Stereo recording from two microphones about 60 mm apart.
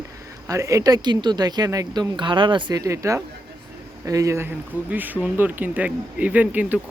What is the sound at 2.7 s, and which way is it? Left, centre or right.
Speech, right.